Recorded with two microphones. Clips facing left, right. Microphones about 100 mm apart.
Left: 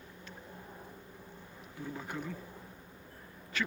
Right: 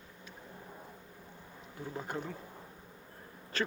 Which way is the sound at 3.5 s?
35° right (ahead or behind).